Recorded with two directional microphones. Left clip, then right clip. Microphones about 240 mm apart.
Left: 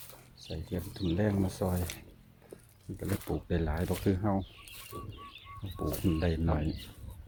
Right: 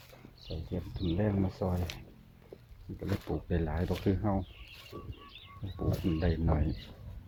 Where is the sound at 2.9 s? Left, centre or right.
Centre.